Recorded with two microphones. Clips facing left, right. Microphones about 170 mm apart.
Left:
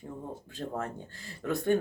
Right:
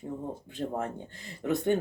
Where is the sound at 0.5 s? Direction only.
20° right (ahead or behind).